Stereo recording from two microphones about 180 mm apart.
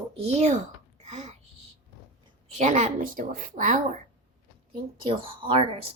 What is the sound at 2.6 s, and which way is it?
A woman's voice, 40° right (ahead or behind).